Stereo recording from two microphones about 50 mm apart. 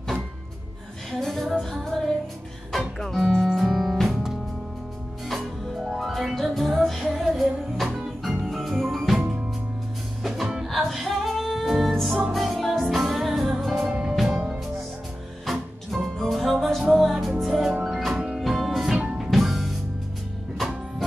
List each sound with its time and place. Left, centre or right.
1.1 s music: centre
5.9 s music: centre
10.2 s music: centre
13.7 s music: right
14.0 s music: centre
15.4 s music: centre